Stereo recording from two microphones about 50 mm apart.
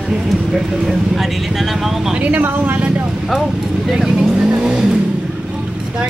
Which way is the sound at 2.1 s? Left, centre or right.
Right.